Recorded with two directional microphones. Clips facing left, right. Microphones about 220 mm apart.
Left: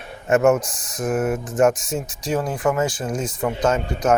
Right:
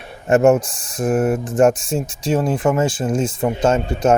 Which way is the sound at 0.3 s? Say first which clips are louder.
Right 3 dB; 30° right (ahead or behind).